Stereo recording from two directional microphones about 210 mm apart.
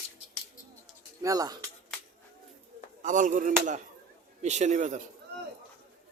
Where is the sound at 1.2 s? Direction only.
15° right (ahead or behind).